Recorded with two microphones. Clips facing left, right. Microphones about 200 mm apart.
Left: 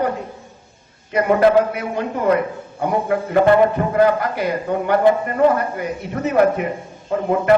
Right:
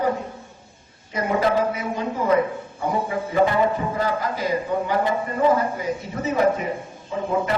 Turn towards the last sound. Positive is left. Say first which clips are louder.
# left 5 dB
turn(degrees=65)  # may be behind; listen again after turning